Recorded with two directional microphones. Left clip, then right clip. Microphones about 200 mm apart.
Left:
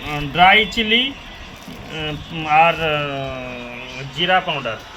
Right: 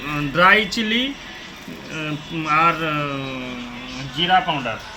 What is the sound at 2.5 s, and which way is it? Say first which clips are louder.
Speech: left 3 dB; 35° left (ahead or behind).